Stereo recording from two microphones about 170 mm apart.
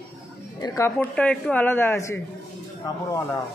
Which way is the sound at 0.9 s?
5° left (ahead or behind).